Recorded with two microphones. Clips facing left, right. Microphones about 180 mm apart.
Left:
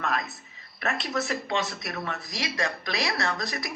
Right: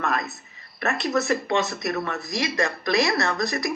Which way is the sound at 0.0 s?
45° right (ahead or behind).